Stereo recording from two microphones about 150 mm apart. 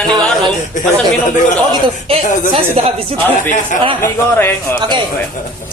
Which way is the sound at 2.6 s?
40° right (ahead or behind).